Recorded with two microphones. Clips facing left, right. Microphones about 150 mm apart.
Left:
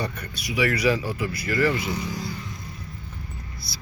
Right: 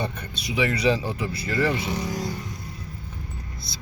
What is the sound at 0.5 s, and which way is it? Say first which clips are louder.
Speech: even; 25° right (ahead or behind).